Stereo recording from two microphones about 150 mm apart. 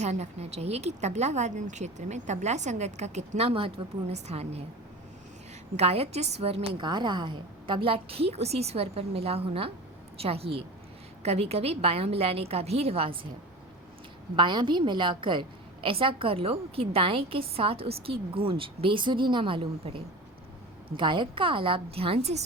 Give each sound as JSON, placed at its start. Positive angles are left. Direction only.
{"t": 0.0, "sound": "a woman's voice", "side_deg": -50}
{"t": 5.7, "sound": "a woman's voice", "side_deg": -45}
{"t": 14.3, "sound": "a woman's voice", "side_deg": -30}